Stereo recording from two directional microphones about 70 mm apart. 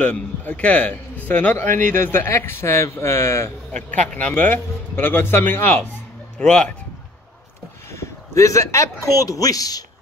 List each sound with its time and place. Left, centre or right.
0.0 s a man's voice: centre; by 3.5 s left
3.7 s a man's voice: left
6.3 s speech: centre
7.9 s speech: left